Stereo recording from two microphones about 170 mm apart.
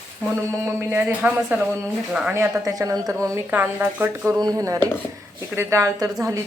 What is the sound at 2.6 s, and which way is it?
A woman's voice, 20° right (ahead or behind).